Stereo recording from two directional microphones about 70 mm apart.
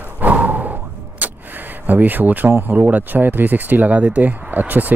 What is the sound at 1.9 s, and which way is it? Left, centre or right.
Speech, right.